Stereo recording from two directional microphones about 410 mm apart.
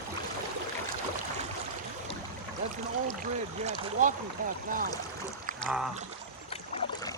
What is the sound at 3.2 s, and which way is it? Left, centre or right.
Speech, centre.